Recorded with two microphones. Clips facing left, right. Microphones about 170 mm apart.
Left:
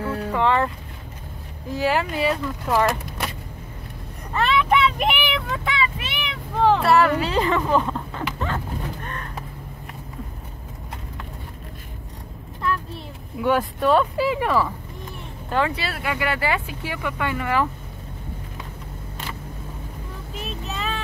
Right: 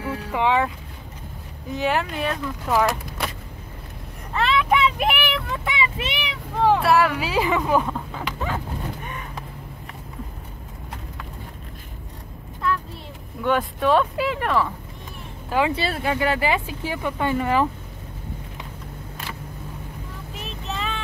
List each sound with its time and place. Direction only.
0.0 s boat: 5° right (ahead or behind)
1.7 s speech: centre (ahead or behind)
4.4 s vehicle: centre (ahead or behind)
5.7 s child singing: 20° right (ahead or behind)
6.6 s speech: 5° right (ahead or behind)
9.0 s crow: 10° right (ahead or behind)
13.4 s speech: 5° left (ahead or behind)
15.7 s speech: 25° right (ahead or behind)
20.3 s child singing: centre (ahead or behind)